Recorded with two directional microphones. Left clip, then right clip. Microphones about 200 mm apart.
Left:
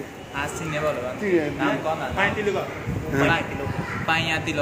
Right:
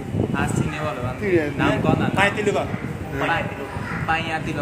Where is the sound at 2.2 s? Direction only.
65° right (ahead or behind).